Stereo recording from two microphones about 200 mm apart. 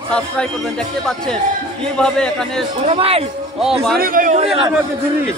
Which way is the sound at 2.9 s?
30° right (ahead or behind).